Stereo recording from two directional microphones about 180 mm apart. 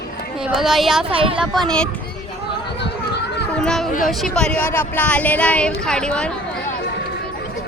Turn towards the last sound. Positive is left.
turn(degrees=5)  # may be behind; listen again after turning